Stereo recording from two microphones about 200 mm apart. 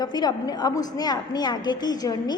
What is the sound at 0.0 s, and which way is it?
A woman's voice, 20° left (ahead or behind).